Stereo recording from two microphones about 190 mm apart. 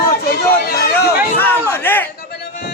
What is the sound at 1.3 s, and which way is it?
Speech, 10° left (ahead or behind).